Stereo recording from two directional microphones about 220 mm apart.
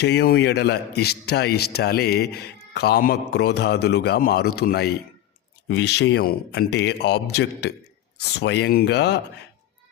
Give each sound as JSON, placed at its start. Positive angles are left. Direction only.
{"t": 0.0, "sound": "a man's voice", "side_deg": 50}